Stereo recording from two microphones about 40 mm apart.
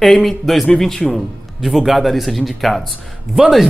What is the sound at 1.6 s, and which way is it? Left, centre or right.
A woman's voice, centre.